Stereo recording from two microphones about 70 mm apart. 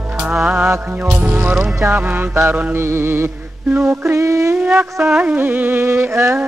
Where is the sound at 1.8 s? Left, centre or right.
Right.